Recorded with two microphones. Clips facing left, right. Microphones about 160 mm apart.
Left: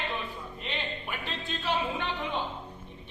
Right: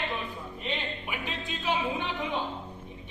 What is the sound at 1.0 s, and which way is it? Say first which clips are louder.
Music: right 1 dB; 10° right (ahead or behind).